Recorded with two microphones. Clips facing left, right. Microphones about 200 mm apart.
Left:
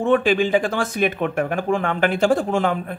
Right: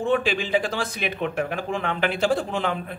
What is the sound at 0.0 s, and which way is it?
Speech, 50° left (ahead or behind).